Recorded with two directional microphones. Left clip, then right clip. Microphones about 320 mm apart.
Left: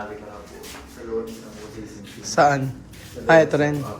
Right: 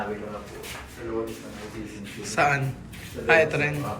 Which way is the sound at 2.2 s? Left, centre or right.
Centre.